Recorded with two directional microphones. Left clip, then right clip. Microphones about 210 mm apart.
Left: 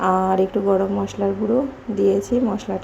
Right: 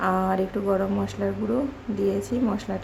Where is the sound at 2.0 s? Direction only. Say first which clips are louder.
Left 7 dB; 10° left (ahead or behind).